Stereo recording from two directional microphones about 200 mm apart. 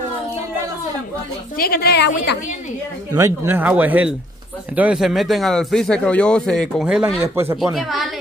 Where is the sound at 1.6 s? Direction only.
50° left (ahead or behind).